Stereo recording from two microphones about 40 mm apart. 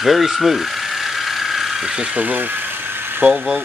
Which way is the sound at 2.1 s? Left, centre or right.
Right.